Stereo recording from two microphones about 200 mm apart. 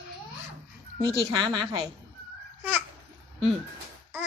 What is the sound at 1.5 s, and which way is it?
Speech, 20° right (ahead or behind).